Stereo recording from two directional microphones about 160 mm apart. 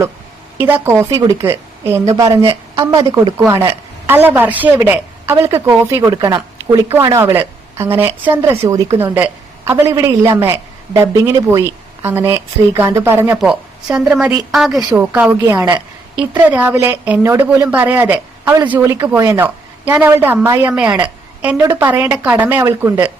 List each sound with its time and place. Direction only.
0.6 s a woman's voice: 15° right (ahead or behind)
13.4 s a woman's voice: 5° right (ahead or behind)